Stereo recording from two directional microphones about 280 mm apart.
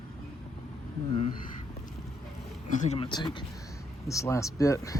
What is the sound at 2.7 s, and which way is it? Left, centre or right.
Speech, left.